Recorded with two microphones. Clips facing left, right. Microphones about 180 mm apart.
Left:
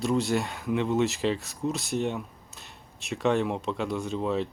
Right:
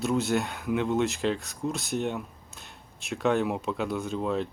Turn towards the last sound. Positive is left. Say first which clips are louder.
# left 1 dB
turn(degrees=0)  # may be behind; listen again after turning